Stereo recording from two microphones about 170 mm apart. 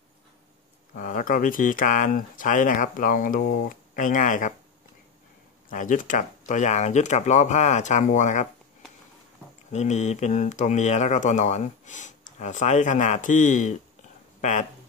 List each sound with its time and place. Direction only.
0.9 s speech: 50° left (ahead or behind)
5.7 s speech: 50° left (ahead or behind)
9.7 s speech: 45° left (ahead or behind)